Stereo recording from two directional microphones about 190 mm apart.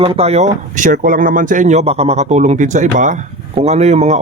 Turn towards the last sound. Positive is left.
turn(degrees=-35)  # may be behind; listen again after turning